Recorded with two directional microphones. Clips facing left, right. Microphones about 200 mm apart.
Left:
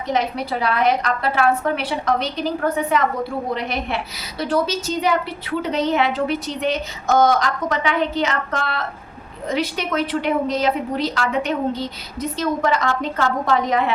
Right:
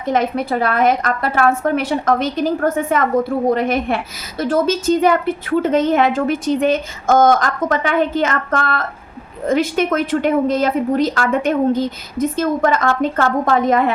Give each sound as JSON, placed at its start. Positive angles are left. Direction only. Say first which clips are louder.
{"t": 0.0, "sound": "a woman's voice", "louder": "right 4 dB", "side_deg": -50}